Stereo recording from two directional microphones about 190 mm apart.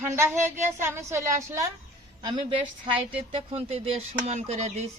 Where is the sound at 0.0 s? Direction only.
15° right (ahead or behind).